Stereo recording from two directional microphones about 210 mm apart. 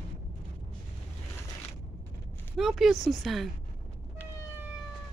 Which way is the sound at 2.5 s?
Centre (ahead or behind).